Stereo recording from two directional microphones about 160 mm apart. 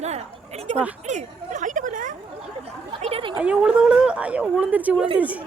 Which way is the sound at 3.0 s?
35° right (ahead or behind).